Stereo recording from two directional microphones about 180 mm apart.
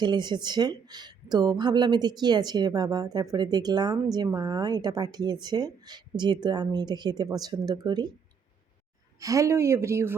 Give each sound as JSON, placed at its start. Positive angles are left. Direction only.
{"t": 0.0, "sound": "speech", "side_deg": -25}
{"t": 9.2, "sound": "speech", "side_deg": -20}